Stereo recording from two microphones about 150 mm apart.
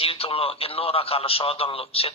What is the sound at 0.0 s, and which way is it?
A man's voice, 40° left (ahead or behind).